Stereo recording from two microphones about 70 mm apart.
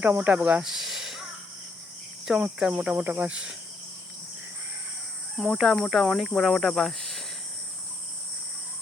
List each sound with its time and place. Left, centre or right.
0.1 s speech: right; by 1.3 s centre
2.4 s speech: centre
5.4 s speech: centre